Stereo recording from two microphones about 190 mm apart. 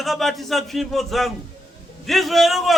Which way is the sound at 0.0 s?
Centre (ahead or behind).